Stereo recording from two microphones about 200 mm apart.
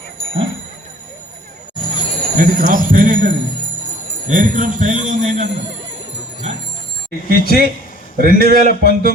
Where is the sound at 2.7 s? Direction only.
45° right (ahead or behind).